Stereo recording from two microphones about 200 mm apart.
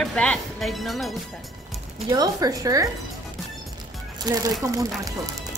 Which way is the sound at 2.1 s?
20° right (ahead or behind).